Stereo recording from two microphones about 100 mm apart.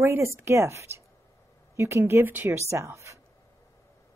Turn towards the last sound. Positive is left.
turn(degrees=-30)  # may be behind; listen again after turning